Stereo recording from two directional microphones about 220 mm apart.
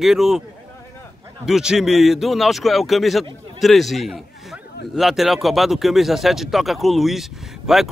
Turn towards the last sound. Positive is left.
turn(degrees=0)  # may be behind; listen again after turning